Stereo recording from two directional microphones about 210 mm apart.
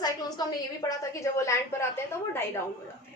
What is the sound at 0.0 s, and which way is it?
A woman's voice, 15° left (ahead or behind).